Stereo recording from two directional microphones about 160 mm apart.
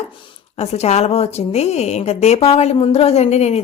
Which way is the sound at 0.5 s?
40° left (ahead or behind).